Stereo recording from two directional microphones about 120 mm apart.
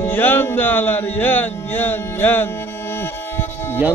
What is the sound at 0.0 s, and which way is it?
Music, 15° left (ahead or behind).